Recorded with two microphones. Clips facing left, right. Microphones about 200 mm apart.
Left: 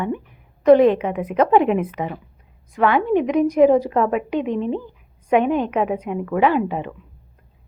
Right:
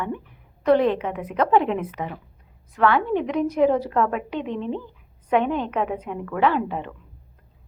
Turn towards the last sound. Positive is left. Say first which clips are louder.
# left 3 dB
turn(degrees=10)  # may be behind; listen again after turning